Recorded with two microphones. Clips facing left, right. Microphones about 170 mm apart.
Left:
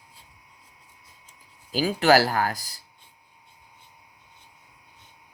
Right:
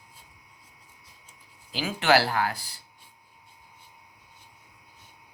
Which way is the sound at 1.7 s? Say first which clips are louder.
Left 4 dB; 40° left (ahead or behind).